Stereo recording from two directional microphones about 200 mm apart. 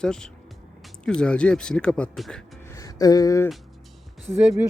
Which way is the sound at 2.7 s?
15° left (ahead or behind).